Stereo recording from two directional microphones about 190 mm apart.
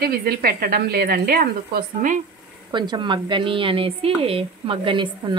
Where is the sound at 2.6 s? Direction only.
25° right (ahead or behind).